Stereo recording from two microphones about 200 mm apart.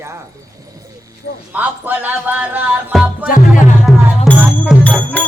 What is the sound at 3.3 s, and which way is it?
Music, 45° left (ahead or behind).